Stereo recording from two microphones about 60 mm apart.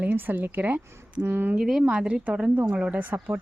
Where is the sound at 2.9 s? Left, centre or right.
Right.